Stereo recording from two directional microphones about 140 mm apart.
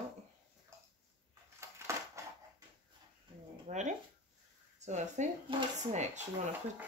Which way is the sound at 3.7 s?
60° right (ahead or behind).